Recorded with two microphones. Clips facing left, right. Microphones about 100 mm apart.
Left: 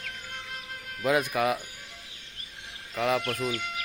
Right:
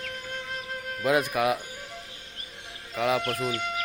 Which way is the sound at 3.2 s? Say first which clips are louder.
Right 2 dB; 35° right (ahead or behind).